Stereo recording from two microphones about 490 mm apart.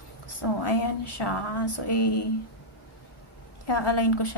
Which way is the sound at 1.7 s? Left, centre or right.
Left.